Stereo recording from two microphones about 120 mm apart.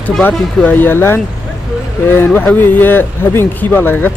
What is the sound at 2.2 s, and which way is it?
Speech, 15° left (ahead or behind).